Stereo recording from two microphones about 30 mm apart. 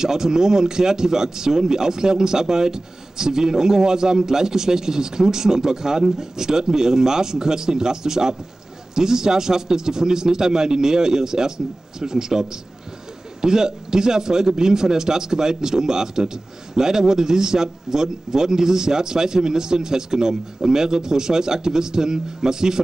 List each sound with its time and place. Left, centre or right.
0.0 s speech: centre